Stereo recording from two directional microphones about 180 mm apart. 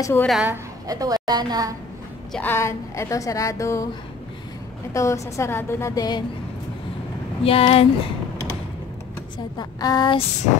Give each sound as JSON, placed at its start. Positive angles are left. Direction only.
{"t": 0.0, "sound": "a woman's voice", "side_deg": 10}
{"t": 0.3, "sound": "a woman's voice", "side_deg": -5}
{"t": 0.8, "sound": "a woman's voice", "side_deg": -20}
{"t": 2.3, "sound": "a woman's voice", "side_deg": 10}
{"t": 4.9, "sound": "a woman's voice", "side_deg": 15}
{"t": 7.4, "sound": "speech", "side_deg": 30}
{"t": 9.6, "sound": "a woman's voice", "side_deg": 20}